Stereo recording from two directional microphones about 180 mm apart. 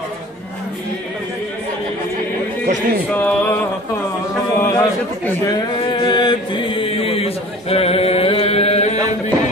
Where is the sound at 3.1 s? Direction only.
10° left (ahead or behind).